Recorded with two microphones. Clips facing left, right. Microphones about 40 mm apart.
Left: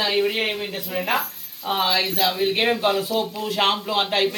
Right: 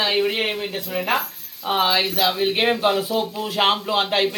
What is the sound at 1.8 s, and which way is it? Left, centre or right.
A man's voice, right.